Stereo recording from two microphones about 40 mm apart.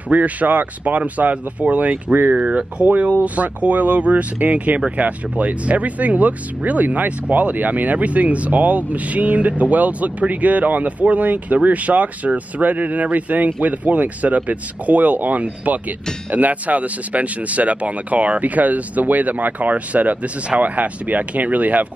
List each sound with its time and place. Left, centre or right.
0.1 s speech: right
2.9 s speech: right